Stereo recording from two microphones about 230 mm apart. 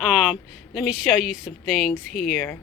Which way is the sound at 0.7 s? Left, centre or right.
Centre.